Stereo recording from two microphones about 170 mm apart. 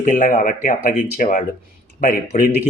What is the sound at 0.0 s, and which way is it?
Speech, 50° left (ahead or behind).